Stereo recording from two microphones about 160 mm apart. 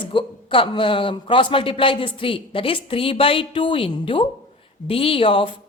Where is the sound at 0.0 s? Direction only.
30° left (ahead or behind).